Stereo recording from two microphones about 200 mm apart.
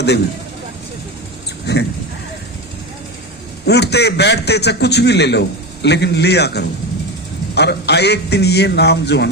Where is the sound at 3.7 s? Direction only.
55° left (ahead or behind).